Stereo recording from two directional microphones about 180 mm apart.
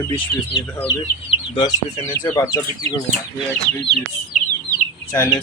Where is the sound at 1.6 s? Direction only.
25° left (ahead or behind).